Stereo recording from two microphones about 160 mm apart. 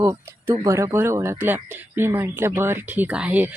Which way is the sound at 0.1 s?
20° right (ahead or behind).